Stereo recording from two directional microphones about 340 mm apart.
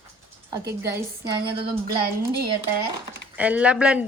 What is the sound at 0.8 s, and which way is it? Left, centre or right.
Speech, centre.